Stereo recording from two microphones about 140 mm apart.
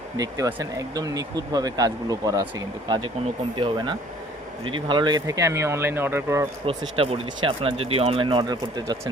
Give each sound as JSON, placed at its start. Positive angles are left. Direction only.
{"t": 0.2, "sound": "speech", "side_deg": -25}
{"t": 6.7, "sound": "speech", "side_deg": -40}